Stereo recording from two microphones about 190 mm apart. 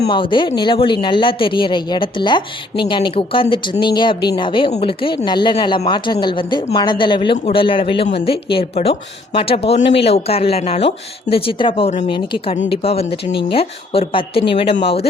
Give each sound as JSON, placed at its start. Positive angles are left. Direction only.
{"t": 0.1, "sound": "speech", "side_deg": 25}